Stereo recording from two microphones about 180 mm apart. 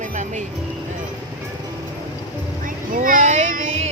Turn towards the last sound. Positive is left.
turn(degrees=-45)  # may be behind; listen again after turning